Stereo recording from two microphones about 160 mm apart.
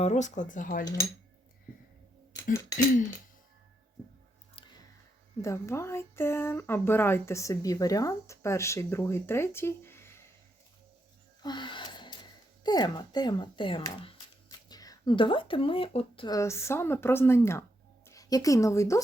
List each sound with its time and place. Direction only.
0.0 s speech: 50° left (ahead or behind)
2.3 s a sound: 20° left (ahead or behind)
5.4 s speech: 20° left (ahead or behind)
11.4 s speech: 30° left (ahead or behind)
16.3 s speech: 20° left (ahead or behind)